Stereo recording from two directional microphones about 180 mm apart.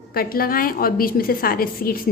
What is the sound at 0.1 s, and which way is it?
A woman's voice, 55° left (ahead or behind).